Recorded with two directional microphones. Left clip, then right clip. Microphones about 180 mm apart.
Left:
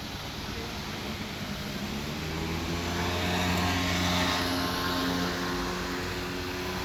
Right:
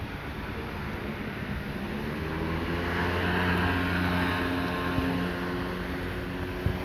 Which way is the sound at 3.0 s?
45° left (ahead or behind).